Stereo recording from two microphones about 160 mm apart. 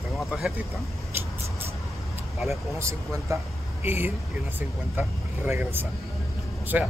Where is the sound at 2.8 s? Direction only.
20° right (ahead or behind).